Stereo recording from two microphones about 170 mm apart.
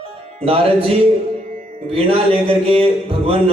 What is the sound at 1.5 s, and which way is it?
Music, 50° right (ahead or behind).